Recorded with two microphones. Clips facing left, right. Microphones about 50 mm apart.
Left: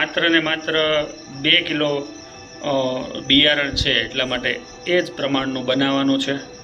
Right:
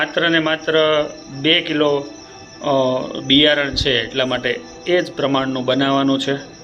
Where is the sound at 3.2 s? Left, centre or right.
Centre.